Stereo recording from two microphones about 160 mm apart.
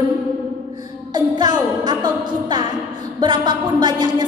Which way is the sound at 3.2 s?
30° right (ahead or behind).